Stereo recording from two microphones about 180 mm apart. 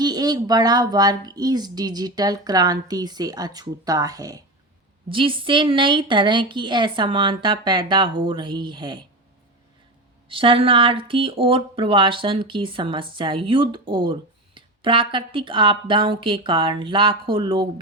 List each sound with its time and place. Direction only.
0.0 s speech: 20° right (ahead or behind)
10.2 s speech: 30° right (ahead or behind)